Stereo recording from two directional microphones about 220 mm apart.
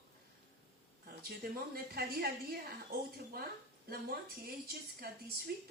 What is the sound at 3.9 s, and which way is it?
Speech, 45° right (ahead or behind).